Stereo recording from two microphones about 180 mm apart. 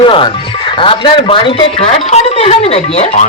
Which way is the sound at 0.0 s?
30° left (ahead or behind).